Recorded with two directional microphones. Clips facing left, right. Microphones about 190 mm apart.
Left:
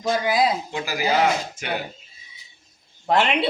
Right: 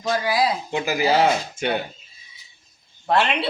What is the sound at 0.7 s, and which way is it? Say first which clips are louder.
Speech: right 3 dB; 25° right (ahead or behind).